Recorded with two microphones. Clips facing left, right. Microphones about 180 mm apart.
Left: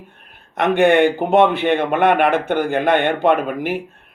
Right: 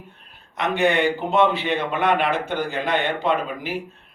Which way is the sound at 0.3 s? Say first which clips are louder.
Left 7 dB; 55° left (ahead or behind).